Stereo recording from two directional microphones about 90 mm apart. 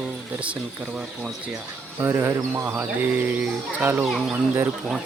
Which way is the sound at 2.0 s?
30° right (ahead or behind).